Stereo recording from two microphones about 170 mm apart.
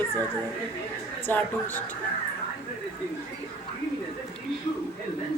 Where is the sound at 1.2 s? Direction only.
10° left (ahead or behind).